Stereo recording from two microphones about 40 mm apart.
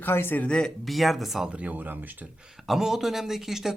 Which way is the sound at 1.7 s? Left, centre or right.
Right.